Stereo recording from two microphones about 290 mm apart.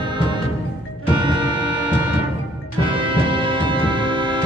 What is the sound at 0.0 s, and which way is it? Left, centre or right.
Music, centre.